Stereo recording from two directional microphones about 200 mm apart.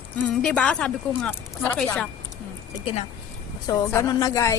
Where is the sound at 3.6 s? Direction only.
15° left (ahead or behind).